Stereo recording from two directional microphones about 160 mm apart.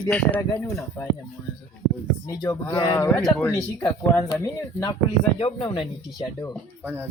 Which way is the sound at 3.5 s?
20° left (ahead or behind).